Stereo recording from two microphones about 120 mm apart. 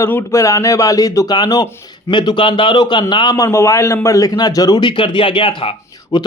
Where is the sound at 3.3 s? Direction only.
25° left (ahead or behind).